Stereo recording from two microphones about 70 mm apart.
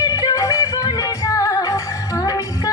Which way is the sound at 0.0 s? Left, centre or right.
Left.